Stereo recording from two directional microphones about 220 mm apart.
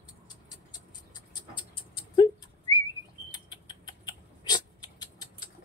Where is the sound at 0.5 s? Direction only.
20° left (ahead or behind).